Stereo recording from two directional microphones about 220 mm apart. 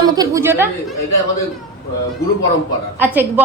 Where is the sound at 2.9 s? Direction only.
10° right (ahead or behind).